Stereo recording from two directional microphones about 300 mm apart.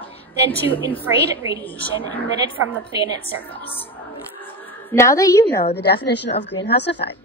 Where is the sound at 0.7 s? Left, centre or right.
Centre.